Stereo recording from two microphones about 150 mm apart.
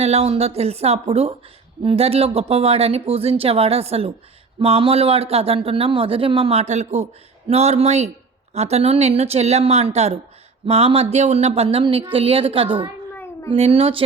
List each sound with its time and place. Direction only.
0.0 s a woman's voice: 45° right (ahead or behind)